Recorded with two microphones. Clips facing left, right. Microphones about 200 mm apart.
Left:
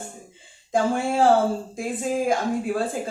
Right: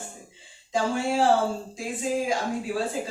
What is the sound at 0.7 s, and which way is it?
Speech, 50° left (ahead or behind).